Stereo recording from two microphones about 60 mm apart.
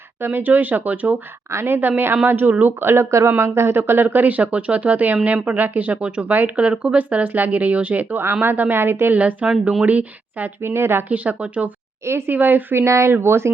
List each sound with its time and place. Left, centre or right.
0.2 s a woman's voice: right
2.9 s speech: right
8.2 s a woman's voice: right
9.1 s speech: right
10.6 s a woman's voice: right
11.1 s speech: right
12.0 s a woman's voice: right
12.3 s a woman's voice: right
12.8 s a woman's voice: right